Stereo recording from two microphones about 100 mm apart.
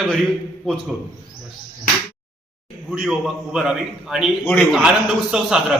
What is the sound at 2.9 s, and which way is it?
A man's voice, 5° right (ahead or behind).